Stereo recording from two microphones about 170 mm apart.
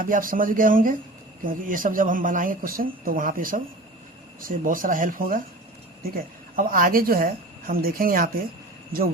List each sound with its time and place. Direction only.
0.0 s a woman's voice: 55° right (ahead or behind)